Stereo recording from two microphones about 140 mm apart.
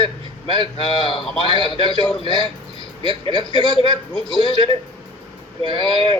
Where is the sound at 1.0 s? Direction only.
40° left (ahead or behind).